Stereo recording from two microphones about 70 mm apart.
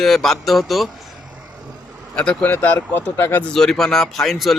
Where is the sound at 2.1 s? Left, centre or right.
Centre.